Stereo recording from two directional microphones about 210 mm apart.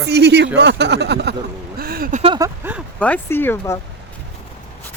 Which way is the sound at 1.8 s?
45° right (ahead or behind).